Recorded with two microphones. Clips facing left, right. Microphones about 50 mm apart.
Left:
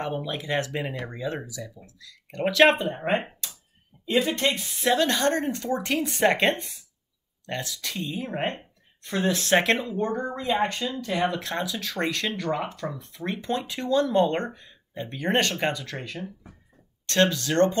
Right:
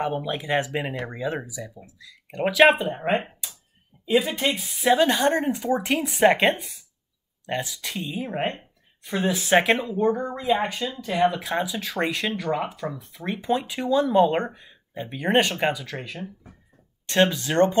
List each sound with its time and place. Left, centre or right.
0.0 s speech: centre
7.4 s speech: centre
17.0 s speech: centre